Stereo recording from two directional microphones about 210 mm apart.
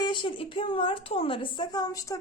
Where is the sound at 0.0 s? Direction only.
25° left (ahead or behind).